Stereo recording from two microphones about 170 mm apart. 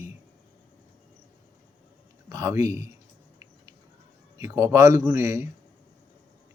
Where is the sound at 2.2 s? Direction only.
20° right (ahead or behind).